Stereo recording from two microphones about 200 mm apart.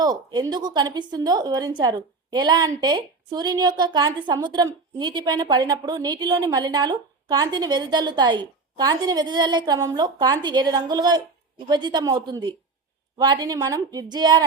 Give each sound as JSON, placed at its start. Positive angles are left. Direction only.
{"t": 0.0, "sound": "a woman's voice", "side_deg": -20}